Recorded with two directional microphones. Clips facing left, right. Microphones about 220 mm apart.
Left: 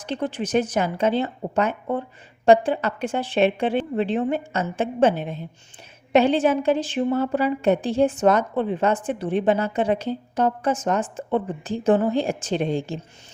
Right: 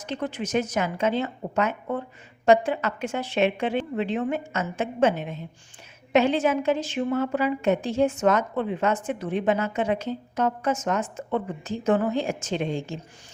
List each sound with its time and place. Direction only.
0.0 s a woman's voice: 30° left (ahead or behind)